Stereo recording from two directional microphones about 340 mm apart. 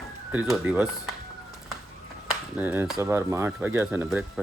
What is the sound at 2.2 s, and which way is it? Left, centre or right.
Speech, centre.